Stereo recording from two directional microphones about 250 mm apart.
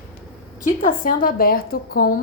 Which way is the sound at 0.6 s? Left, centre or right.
Left.